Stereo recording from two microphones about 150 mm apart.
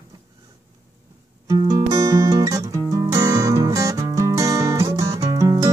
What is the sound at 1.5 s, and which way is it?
Music, 25° right (ahead or behind).